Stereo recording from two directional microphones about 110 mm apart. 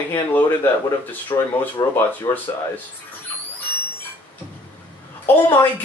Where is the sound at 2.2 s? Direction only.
35° left (ahead or behind).